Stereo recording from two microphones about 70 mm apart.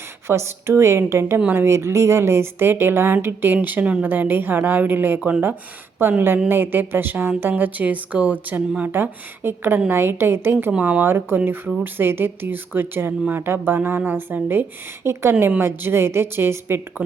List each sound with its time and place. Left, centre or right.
0.3 s a woman's voice: right
10.7 s speech: centre
11.0 s speech: right